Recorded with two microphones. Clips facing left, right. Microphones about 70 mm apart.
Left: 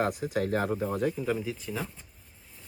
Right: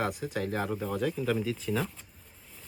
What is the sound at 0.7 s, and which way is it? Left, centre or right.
Speech, left.